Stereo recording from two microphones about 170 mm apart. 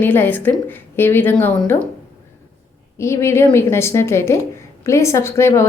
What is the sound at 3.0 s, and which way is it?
A woman's voice, 15° left (ahead or behind).